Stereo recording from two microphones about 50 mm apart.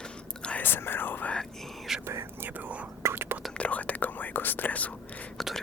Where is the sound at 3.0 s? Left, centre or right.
Right.